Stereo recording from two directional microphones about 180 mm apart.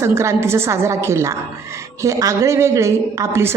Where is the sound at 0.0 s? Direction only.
15° right (ahead or behind).